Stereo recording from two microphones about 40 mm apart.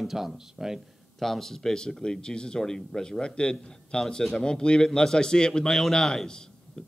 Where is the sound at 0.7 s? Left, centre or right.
Centre; by 4.0 s left.